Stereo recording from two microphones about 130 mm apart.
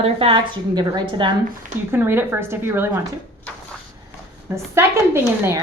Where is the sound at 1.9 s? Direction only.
15° right (ahead or behind).